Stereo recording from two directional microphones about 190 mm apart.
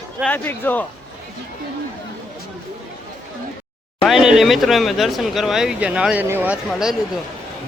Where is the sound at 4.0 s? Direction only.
Centre (ahead or behind).